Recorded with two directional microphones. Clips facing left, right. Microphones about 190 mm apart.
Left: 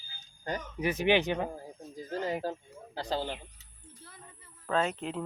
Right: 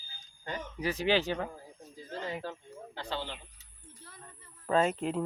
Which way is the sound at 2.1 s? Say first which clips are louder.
Left 5 dB; 40° left (ahead or behind).